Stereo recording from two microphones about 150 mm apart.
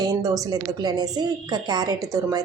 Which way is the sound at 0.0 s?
25° right (ahead or behind).